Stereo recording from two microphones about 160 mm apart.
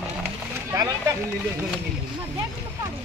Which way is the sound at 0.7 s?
20° right (ahead or behind).